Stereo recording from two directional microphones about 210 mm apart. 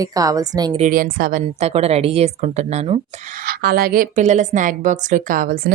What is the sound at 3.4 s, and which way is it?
A woman's voice, 45° right (ahead or behind).